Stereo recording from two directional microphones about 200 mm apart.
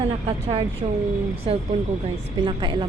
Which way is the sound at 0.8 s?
25° right (ahead or behind).